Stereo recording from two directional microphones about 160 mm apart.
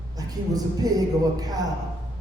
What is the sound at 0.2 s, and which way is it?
A man's voice, 25° right (ahead or behind).